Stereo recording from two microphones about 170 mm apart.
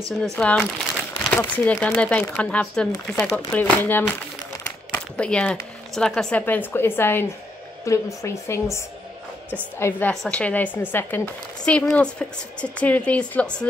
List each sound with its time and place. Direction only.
0.2 s a woman's voice: 5° left (ahead or behind)